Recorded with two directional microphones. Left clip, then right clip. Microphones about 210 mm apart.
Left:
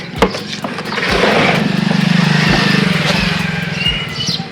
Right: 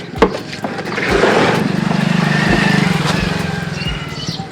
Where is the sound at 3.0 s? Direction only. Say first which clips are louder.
Left 3 dB; 45° right (ahead or behind).